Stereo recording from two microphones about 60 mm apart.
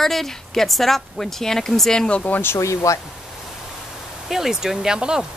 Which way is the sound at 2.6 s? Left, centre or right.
Left.